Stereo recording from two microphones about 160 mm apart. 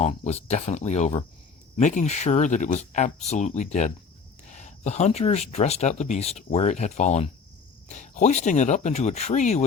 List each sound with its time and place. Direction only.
0.0 s speech: 40° left (ahead or behind)